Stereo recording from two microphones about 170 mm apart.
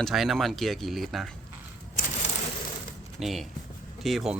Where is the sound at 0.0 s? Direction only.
Centre (ahead or behind).